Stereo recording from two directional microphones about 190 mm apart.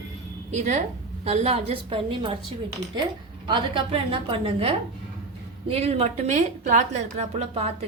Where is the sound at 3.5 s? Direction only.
25° right (ahead or behind).